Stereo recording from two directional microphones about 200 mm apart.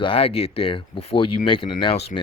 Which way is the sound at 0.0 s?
25° left (ahead or behind).